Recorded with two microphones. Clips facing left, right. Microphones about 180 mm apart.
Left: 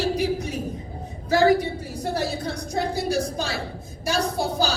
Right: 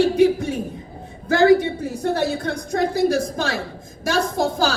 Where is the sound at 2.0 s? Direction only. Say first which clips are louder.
Right 5 dB; 80° right.